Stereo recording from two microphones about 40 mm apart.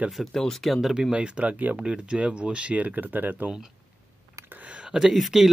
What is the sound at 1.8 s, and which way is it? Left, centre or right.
Speech, right.